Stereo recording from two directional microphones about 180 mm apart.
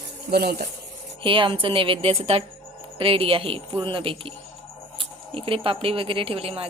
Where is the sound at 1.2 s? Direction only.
30° right (ahead or behind).